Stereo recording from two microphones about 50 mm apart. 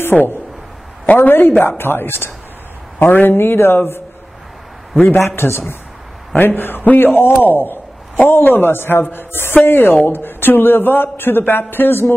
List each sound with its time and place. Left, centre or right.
0.0 s a man's voice: left
5.2 s a man's voice: left
6.3 s a man's voice: left